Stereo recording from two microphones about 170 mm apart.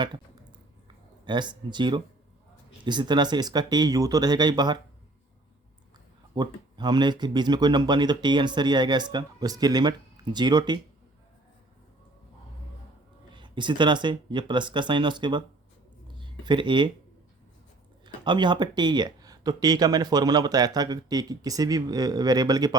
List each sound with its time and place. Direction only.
1.2 s speech: 25° right (ahead or behind)
6.3 s speech: 25° right (ahead or behind)
13.3 s speech: 25° right (ahead or behind)
18.0 s speech: 25° right (ahead or behind)